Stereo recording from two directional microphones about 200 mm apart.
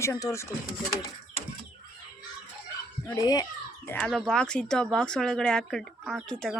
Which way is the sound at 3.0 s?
15° left (ahead or behind).